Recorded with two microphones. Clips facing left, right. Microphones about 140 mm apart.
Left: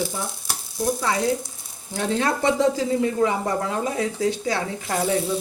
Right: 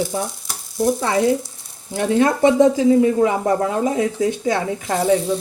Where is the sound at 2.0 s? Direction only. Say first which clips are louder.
Right 7 dB; 15° right (ahead or behind).